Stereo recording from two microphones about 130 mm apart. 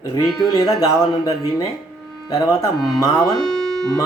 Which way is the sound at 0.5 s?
35° left (ahead or behind).